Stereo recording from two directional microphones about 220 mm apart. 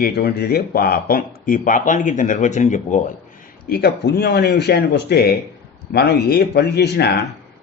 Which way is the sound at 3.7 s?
45° left (ahead or behind).